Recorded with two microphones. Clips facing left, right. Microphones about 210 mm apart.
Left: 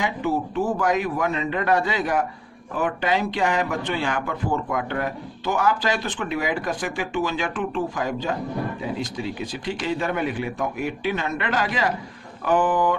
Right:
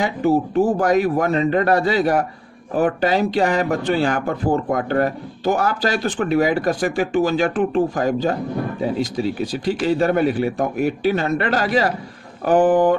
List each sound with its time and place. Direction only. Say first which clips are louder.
0.0 s speech: right 6 dB; 40° right (ahead or behind)